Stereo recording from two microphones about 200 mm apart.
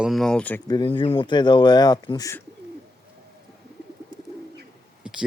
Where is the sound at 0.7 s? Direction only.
25° left (ahead or behind).